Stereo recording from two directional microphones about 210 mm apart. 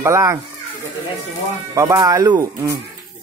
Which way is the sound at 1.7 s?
15° right (ahead or behind).